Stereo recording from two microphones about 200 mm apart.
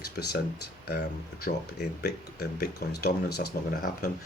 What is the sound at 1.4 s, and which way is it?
Speech, 50° left (ahead or behind).